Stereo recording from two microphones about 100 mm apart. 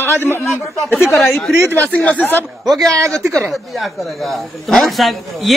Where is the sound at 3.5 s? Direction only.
Centre (ahead or behind).